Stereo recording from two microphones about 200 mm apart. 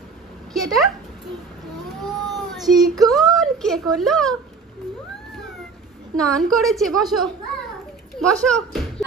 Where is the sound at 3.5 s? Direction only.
Centre (ahead or behind).